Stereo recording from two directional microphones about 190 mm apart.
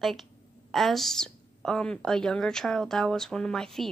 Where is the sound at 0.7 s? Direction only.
Centre (ahead or behind).